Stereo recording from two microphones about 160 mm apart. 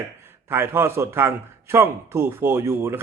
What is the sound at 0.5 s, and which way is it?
A man's voice, 15° right (ahead or behind).